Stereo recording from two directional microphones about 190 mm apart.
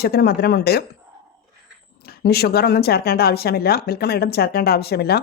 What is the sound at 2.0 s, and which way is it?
Speech, 55° left (ahead or behind).